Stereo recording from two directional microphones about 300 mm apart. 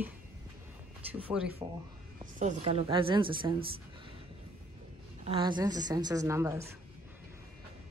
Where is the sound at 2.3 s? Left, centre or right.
Right.